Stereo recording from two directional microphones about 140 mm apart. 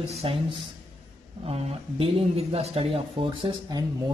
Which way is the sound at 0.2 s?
40° right (ahead or behind).